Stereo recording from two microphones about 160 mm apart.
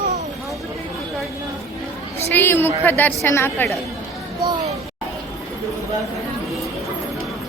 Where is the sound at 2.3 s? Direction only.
15° left (ahead or behind).